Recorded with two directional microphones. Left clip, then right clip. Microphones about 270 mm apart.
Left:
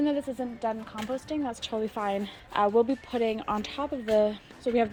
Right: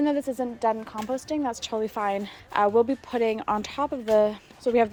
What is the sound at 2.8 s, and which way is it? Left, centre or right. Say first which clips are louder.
Speech: right 3 dB; right.